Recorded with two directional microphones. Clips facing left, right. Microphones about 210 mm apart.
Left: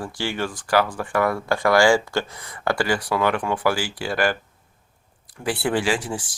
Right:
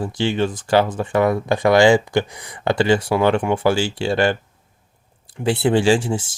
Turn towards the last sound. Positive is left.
turn(degrees=-25)  # may be behind; listen again after turning